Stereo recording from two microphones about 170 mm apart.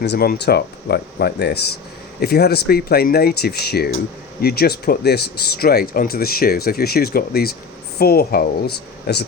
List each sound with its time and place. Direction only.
0.0 s speech: 75° left (ahead or behind)